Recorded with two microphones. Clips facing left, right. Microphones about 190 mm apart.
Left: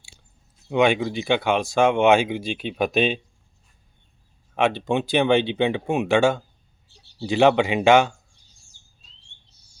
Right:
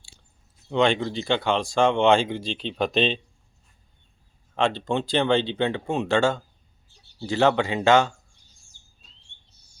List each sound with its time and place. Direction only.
0.7 s speech: 10° left (ahead or behind)
4.5 s speech: 10° left (ahead or behind)